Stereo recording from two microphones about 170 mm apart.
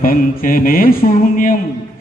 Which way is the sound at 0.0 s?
55° left (ahead or behind).